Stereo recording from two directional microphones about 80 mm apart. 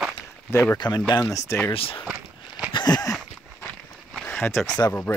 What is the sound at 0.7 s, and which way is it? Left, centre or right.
Speech, left.